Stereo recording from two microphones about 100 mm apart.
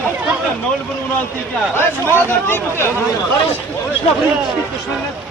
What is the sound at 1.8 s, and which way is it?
Speech, 25° left (ahead or behind).